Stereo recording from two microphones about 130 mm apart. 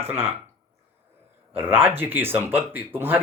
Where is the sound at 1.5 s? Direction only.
15° right (ahead or behind).